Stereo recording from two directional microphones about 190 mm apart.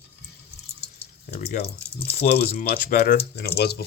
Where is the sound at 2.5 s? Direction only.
45° left (ahead or behind).